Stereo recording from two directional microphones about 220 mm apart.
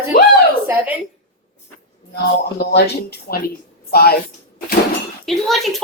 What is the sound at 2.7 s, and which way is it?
Speech, 50° left (ahead or behind).